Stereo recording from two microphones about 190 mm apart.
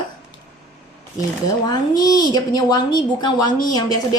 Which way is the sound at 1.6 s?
20° left (ahead or behind).